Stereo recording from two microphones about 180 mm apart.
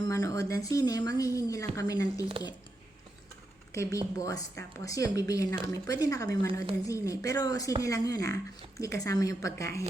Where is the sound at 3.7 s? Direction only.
15° left (ahead or behind).